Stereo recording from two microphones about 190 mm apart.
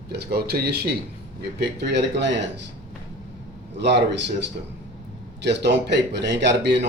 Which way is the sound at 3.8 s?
65° right (ahead or behind).